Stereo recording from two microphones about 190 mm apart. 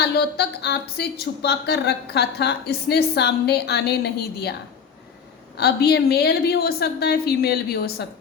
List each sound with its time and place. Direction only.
0.0 s a woman's voice: 60° left (ahead or behind)
5.5 s a woman's voice: 60° left (ahead or behind)